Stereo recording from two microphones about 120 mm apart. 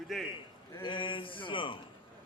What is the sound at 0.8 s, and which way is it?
Speech, 45° left (ahead or behind).